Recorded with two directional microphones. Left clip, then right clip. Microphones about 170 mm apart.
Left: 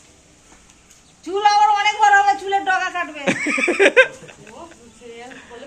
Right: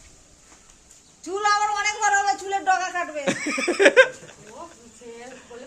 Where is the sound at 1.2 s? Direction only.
90° right.